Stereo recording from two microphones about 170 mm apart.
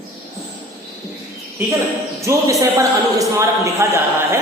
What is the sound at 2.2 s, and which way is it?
A man's voice, 15° right (ahead or behind).